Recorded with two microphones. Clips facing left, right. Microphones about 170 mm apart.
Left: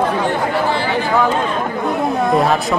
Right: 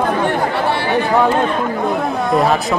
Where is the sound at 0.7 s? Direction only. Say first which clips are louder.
Right 1 dB; 60° right (ahead or behind).